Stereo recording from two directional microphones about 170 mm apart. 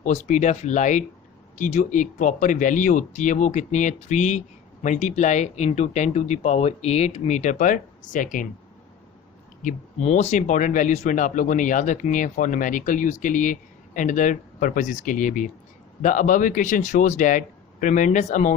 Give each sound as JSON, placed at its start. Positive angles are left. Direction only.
{"t": 0.0, "sound": "speech", "side_deg": 45}
{"t": 9.6, "sound": "speech", "side_deg": 40}